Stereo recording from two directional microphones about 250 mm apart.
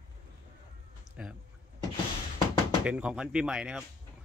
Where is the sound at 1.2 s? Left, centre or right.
Centre.